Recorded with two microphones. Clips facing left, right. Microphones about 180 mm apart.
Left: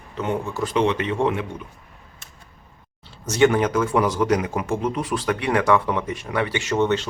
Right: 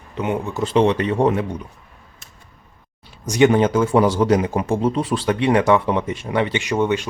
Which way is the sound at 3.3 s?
15° right (ahead or behind).